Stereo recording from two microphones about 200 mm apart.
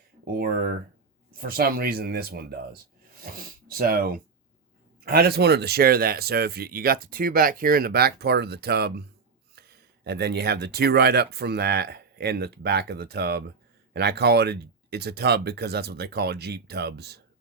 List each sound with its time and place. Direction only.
0.3 s speech: 50° right (ahead or behind)